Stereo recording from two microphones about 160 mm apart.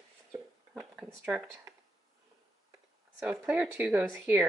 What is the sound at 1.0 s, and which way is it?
Speech, 15° right (ahead or behind).